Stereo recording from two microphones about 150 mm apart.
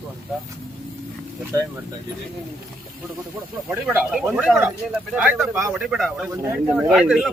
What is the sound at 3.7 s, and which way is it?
Speech, 15° right (ahead or behind).